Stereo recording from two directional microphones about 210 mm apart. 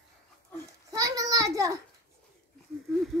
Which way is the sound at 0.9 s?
15° right (ahead or behind).